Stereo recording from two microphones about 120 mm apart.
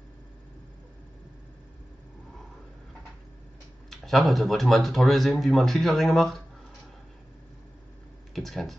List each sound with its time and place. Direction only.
4.0 s speech: centre (ahead or behind)
8.3 s speech: centre (ahead or behind)